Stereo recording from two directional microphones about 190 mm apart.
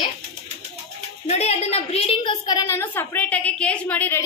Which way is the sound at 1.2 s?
35° left (ahead or behind).